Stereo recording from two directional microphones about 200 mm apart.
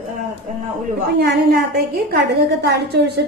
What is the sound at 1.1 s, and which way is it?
A woman's voice, 50° right (ahead or behind).